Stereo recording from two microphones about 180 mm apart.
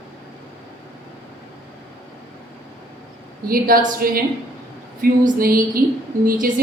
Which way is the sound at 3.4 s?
55° right (ahead or behind).